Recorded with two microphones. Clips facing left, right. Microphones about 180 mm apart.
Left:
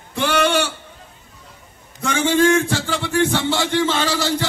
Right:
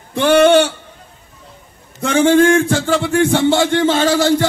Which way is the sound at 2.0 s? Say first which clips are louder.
Right 6 dB; 55° right (ahead or behind).